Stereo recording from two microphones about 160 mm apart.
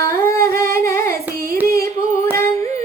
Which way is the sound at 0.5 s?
15° left (ahead or behind).